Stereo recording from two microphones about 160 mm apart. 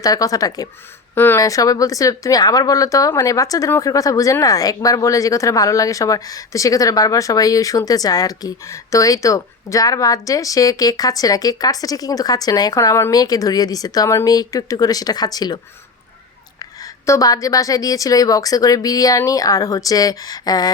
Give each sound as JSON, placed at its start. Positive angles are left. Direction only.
{"t": 0.0, "sound": "speech", "side_deg": 20}